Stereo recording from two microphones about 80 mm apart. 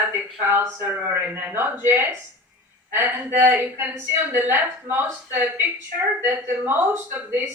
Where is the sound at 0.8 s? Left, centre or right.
Right.